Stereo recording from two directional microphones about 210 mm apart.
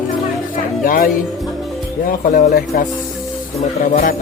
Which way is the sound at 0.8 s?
45° left (ahead or behind).